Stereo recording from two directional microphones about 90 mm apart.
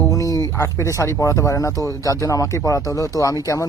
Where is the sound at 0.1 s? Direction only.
40° left (ahead or behind).